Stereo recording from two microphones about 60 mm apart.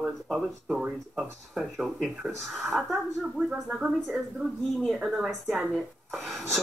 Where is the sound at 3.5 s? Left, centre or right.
Centre.